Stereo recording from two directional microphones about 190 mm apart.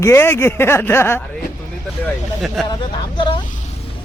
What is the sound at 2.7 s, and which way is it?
Speech, 25° left (ahead or behind).